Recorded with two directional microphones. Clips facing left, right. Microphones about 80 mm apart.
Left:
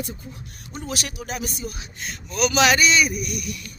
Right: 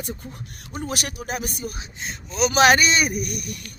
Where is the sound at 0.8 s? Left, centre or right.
Right.